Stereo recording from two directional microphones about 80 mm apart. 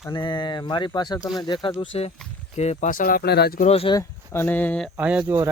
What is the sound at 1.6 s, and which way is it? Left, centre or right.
Speech, left.